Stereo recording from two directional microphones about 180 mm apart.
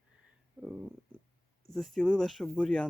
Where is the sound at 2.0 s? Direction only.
5° left (ahead or behind).